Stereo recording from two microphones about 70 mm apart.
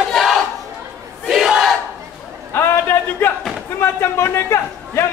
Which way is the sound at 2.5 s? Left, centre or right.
Left.